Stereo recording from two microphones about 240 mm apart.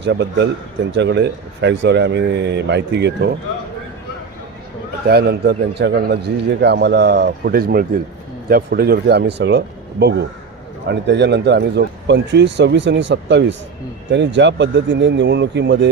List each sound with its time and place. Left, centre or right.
0.0 s a man's voice: right
5.0 s a man's voice: right